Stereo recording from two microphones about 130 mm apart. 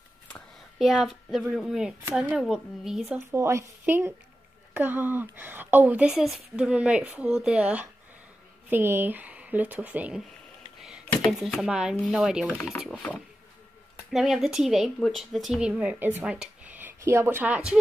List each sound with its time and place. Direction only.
0.7 s speech: centre (ahead or behind)
3.2 s speech: 20° right (ahead or behind)
11.3 s speech: 5° right (ahead or behind)
14.1 s speech: 5° right (ahead or behind)